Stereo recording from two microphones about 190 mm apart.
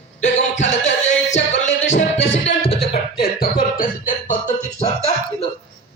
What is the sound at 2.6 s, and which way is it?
Music, 30° left (ahead or behind).